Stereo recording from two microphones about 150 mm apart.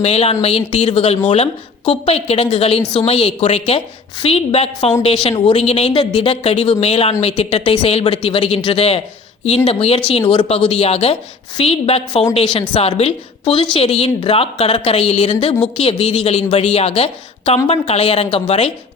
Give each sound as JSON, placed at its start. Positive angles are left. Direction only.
{"t": 0.0, "sound": "a woman's voice", "side_deg": 45}